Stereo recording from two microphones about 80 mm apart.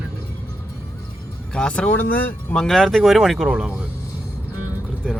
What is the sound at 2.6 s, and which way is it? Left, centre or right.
Speech, centre.